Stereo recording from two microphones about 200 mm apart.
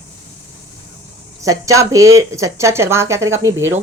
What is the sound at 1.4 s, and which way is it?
Speech, 15° right (ahead or behind).